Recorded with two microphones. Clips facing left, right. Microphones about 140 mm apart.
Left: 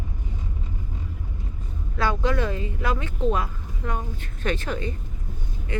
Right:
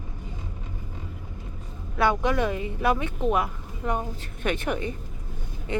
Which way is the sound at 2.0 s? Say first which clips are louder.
Right 2 dB; 20° right (ahead or behind).